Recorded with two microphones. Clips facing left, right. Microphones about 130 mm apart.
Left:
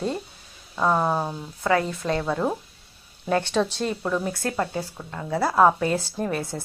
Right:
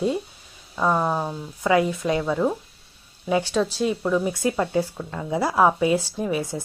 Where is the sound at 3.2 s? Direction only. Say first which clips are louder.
Right 1 dB; 5° right (ahead or behind).